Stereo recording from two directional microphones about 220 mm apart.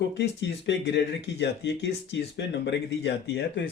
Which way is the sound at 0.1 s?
55° left (ahead or behind).